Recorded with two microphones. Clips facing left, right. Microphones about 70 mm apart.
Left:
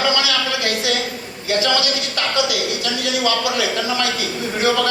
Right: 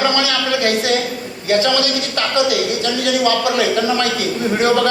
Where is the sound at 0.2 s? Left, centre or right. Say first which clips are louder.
Right 3 dB; right.